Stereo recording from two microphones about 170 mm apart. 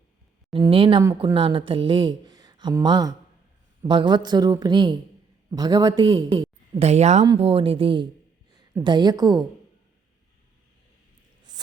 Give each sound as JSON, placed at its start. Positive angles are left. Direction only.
{"t": 0.5, "sound": "a woman's voice", "side_deg": -30}